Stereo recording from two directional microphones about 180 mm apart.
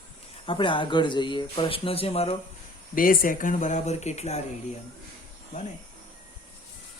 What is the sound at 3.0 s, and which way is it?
Speech, 50° left (ahead or behind).